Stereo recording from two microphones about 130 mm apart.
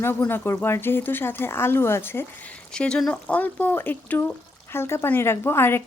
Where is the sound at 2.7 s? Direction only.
5° left (ahead or behind).